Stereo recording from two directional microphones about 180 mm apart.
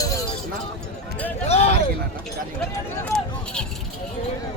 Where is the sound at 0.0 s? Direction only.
20° left (ahead or behind).